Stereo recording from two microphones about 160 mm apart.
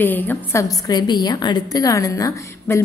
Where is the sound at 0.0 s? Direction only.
10° left (ahead or behind).